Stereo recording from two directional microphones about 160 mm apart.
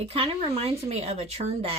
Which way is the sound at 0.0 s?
35° right (ahead or behind).